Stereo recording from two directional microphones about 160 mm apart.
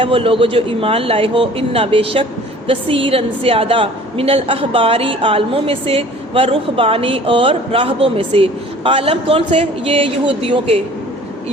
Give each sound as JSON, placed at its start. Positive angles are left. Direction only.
{"t": 0.0, "sound": "a woman's voice", "side_deg": -35}